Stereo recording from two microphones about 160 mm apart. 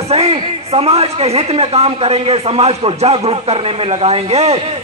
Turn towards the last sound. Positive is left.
turn(degrees=-40)  # may be behind; listen again after turning